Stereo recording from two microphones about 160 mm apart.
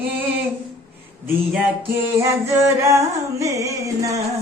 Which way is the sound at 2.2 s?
20° right (ahead or behind).